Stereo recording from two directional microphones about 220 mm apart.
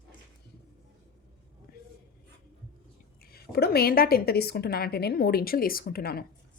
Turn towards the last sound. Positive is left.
turn(degrees=45)  # may be behind; listen again after turning